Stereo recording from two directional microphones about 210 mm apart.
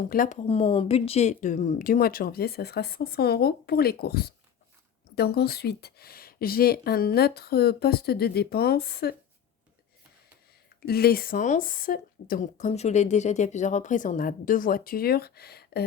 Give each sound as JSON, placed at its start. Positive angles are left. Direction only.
{"t": 0.1, "sound": "speech", "side_deg": 40}
{"t": 0.4, "sound": "speech", "side_deg": 25}
{"t": 10.8, "sound": "speech", "side_deg": 50}